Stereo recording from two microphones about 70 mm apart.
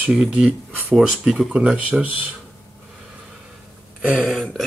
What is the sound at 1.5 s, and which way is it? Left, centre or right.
Speech, centre.